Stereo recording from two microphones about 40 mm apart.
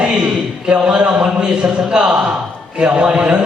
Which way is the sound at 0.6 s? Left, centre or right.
Right.